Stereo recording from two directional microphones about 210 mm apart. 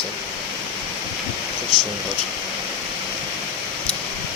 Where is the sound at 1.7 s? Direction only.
20° right (ahead or behind).